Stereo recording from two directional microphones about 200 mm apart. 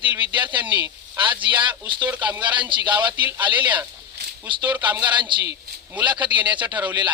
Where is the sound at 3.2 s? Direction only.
10° right (ahead or behind).